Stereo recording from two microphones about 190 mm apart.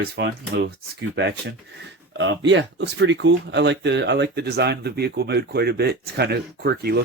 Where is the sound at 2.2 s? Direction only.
75° right (ahead or behind).